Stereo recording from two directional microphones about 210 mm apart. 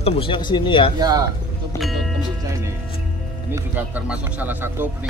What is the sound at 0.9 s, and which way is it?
Speech, 20° right (ahead or behind).